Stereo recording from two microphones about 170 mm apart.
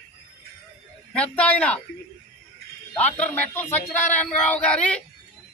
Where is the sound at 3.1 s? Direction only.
10° left (ahead or behind).